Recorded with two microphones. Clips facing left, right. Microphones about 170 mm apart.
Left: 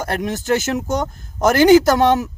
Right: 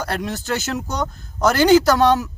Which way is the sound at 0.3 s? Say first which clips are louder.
Left 5 dB; 50° left (ahead or behind).